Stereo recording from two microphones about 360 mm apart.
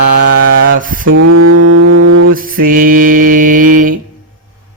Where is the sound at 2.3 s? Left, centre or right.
Right.